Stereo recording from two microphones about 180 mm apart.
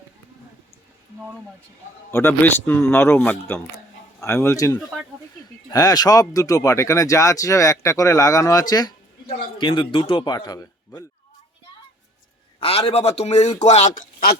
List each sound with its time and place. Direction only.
2.0 s a man's voice: 15° left (ahead or behind)
12.5 s a man's voice: 35° left (ahead or behind); by 14.3 s 50° left (ahead or behind)